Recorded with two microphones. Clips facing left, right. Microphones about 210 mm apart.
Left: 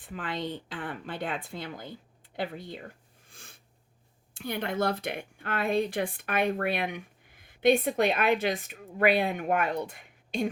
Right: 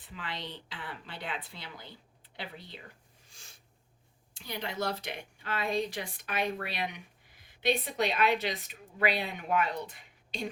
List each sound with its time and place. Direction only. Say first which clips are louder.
0.0 s speech: left 7 dB; 50° left (ahead or behind)
3.2 s a sound: left 6 dB; 55° left (ahead or behind)
4.4 s speech: left 6 dB; 55° left (ahead or behind)